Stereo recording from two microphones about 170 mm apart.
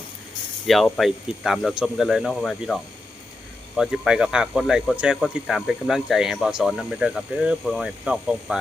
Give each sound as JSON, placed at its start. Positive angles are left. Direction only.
{"t": 0.7, "sound": "speech", "side_deg": 0}
{"t": 3.8, "sound": "speech", "side_deg": -5}